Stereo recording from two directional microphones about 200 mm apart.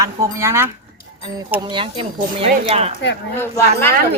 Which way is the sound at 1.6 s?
25° right (ahead or behind).